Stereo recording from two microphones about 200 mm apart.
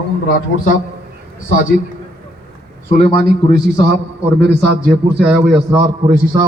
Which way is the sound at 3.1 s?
50° right (ahead or behind).